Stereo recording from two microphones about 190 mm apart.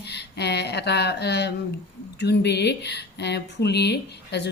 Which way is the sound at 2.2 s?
60° left (ahead or behind).